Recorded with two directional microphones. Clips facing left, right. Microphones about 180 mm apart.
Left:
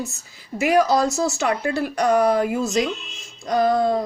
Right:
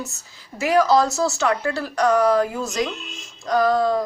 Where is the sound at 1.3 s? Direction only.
15° left (ahead or behind).